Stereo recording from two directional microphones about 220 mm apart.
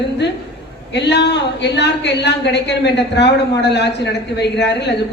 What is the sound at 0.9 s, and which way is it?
A man's voice, 50° left (ahead or behind).